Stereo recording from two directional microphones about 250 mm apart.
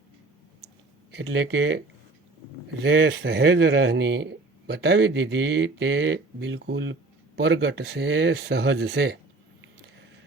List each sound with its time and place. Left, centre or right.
1.1 s speech: right
2.8 s speech: right